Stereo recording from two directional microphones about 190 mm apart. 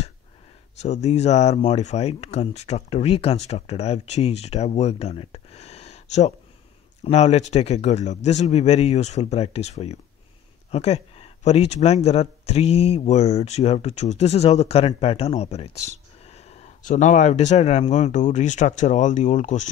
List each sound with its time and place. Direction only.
0.7 s speech: 35° left (ahead or behind)